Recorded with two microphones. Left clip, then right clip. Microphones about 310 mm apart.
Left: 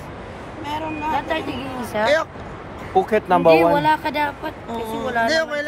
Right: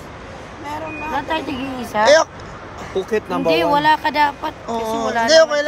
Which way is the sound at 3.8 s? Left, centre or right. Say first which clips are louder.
Right 4 dB; right.